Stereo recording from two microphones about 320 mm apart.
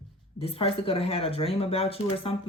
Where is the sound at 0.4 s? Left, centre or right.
Centre.